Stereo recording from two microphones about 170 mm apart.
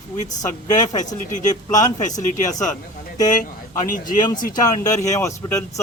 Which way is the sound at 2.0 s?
45° left (ahead or behind).